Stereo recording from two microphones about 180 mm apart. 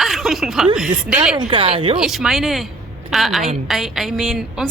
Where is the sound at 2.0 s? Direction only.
Centre (ahead or behind).